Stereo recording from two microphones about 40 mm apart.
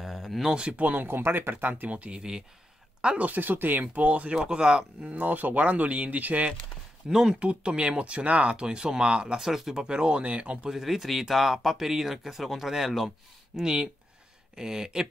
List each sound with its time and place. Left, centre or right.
0.0 s a sound: centre
0.6 s speech: right
1.0 s speech: right
1.5 s speech: right
1.9 s speech: right
2.1 s speech: centre
3.2 s speech: right
4.5 s speech: right
5.1 s speech: right
7.1 s speech: centre
7.3 s speech: right
9.4 s speech: centre
9.8 s speech: right
10.7 s speech: centre